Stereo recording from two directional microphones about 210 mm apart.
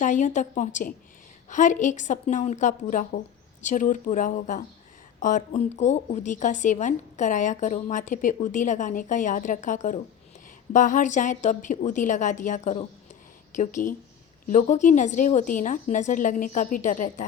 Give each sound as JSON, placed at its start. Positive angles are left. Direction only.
{"t": 0.0, "sound": "a woman's voice", "side_deg": 35}